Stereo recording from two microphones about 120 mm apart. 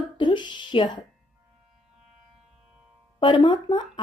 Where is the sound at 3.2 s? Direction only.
45° left (ahead or behind).